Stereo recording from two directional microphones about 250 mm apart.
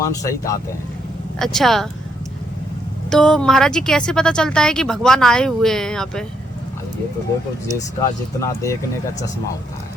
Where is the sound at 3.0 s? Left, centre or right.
Centre.